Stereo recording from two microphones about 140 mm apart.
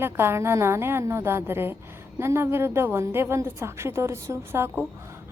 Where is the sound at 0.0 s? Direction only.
15° right (ahead or behind).